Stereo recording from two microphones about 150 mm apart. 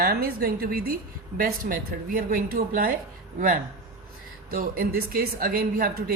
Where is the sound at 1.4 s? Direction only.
70° right (ahead or behind).